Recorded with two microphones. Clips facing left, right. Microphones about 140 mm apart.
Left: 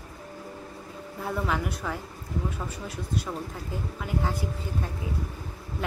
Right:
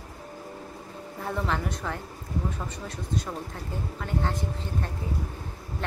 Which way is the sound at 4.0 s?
5° left (ahead or behind).